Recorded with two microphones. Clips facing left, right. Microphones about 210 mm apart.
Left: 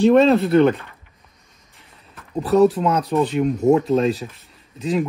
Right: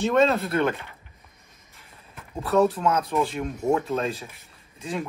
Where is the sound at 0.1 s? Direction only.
30° left (ahead or behind).